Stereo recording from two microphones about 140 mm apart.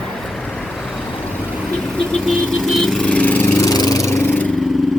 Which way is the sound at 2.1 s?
Centre (ahead or behind).